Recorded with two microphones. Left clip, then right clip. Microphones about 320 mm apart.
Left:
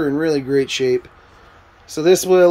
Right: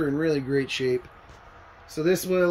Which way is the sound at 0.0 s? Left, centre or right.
Centre.